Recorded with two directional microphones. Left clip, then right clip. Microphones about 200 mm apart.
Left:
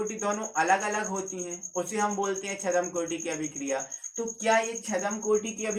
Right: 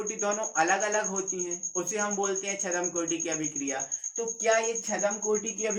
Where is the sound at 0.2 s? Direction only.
15° right (ahead or behind).